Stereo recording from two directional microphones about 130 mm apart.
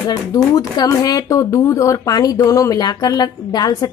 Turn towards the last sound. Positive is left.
turn(degrees=30)  # may be behind; listen again after turning